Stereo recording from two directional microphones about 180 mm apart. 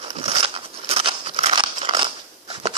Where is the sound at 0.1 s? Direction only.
30° right (ahead or behind).